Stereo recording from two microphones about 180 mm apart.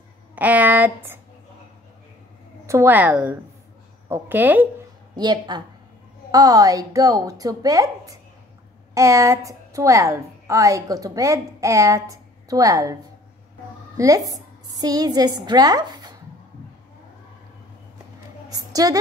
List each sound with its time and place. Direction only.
0.4 s a woman's voice: 10° right (ahead or behind)
2.6 s a woman's voice: 15° right (ahead or behind)
5.1 s a woman's voice: 25° right (ahead or behind)
13.9 s a woman's voice: 20° right (ahead or behind)
18.5 s a sound: 20° right (ahead or behind)